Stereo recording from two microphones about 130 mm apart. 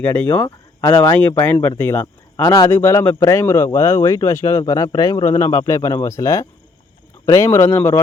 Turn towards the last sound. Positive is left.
turn(degrees=20)  # may be behind; listen again after turning